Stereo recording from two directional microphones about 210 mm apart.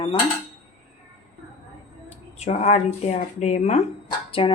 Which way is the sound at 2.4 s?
30° left (ahead or behind).